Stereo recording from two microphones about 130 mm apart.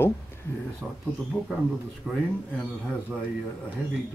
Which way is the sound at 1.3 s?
15° left (ahead or behind).